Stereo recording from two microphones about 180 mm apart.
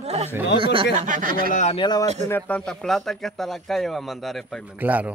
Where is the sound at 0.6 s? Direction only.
30° right (ahead or behind).